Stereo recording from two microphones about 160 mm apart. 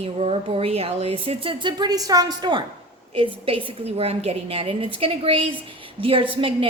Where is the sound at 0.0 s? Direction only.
40° right (ahead or behind).